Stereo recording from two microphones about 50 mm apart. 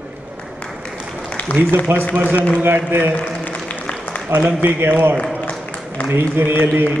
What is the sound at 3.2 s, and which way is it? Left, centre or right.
Applause, left.